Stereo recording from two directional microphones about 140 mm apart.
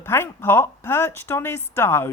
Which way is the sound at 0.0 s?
15° left (ahead or behind).